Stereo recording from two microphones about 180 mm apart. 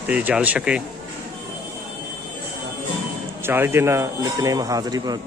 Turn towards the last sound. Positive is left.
turn(degrees=-20)  # may be behind; listen again after turning